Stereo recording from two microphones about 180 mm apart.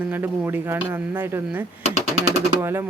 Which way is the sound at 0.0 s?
10° right (ahead or behind).